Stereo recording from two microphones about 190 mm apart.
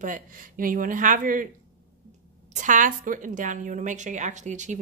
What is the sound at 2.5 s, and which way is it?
A woman's voice, 40° right (ahead or behind).